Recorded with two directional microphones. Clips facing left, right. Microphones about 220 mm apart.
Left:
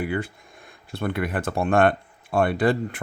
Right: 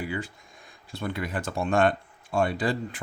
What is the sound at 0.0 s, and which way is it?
Speech, 60° left (ahead or behind).